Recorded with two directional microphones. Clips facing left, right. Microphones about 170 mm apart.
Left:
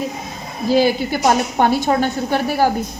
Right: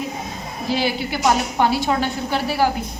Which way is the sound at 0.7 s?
45° left (ahead or behind).